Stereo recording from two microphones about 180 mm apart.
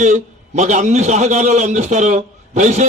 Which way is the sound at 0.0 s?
40° right (ahead or behind).